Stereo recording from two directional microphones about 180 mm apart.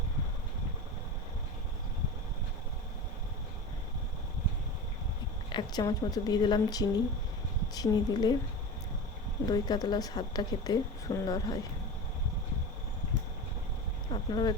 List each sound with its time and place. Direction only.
5.5 s speech: 25° left (ahead or behind)
9.5 s speech: 20° left (ahead or behind)
14.1 s a sound: 25° left (ahead or behind)